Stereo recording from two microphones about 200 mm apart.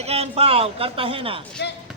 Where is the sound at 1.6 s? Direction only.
55° left (ahead or behind).